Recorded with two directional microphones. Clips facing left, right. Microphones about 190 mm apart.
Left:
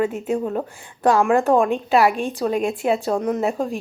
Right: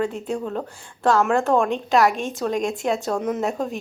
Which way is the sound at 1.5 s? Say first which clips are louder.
Left 2 dB; 5° left (ahead or behind).